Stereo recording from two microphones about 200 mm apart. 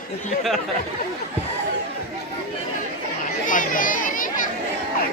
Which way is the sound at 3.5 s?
40° left (ahead or behind).